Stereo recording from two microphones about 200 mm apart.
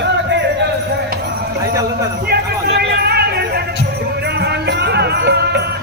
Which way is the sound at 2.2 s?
55° right (ahead or behind).